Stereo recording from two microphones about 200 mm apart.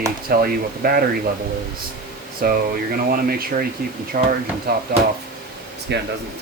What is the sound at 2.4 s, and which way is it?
Speech, 45° right (ahead or behind).